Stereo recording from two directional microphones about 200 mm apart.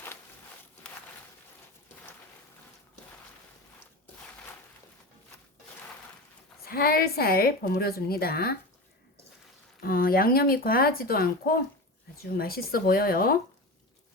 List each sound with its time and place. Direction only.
6.7 s a woman's voice: 50° left (ahead or behind)
9.8 s a woman's voice: 45° left (ahead or behind)